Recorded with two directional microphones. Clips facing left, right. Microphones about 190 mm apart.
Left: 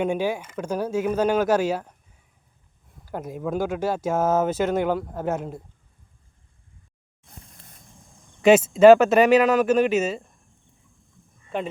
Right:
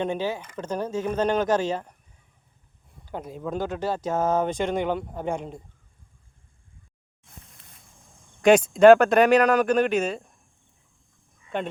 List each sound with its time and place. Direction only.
0.0 s speech: 10° left (ahead or behind)
3.1 s speech: 10° left (ahead or behind)
8.4 s speech: 5° left (ahead or behind)
11.4 s speech: centre (ahead or behind)